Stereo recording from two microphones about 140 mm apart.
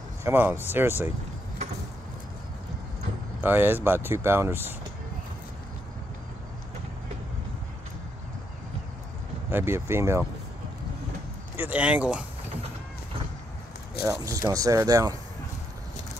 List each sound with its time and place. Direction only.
0.2 s speech: 15° right (ahead or behind)
3.3 s speech: 15° right (ahead or behind)
9.5 s speech: 15° right (ahead or behind)
11.5 s speech: 10° right (ahead or behind)
14.0 s speech: 25° right (ahead or behind)